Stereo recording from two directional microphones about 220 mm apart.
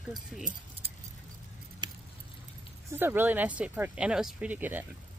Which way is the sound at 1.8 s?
20° right (ahead or behind).